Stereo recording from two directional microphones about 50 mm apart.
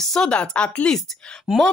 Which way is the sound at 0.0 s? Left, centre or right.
Centre.